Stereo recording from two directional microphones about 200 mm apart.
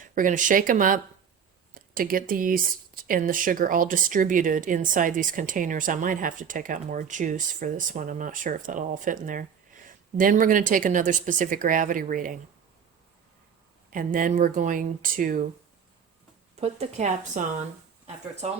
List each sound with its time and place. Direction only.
0.0 s speech: 40° right (ahead or behind)
13.9 s speech: 40° right (ahead or behind)
16.6 s speech: 30° right (ahead or behind)